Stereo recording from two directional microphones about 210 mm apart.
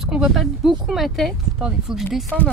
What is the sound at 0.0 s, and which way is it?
Speech, 5° right (ahead or behind).